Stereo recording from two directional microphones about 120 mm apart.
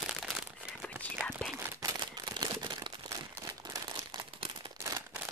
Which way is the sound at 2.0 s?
35° right (ahead or behind).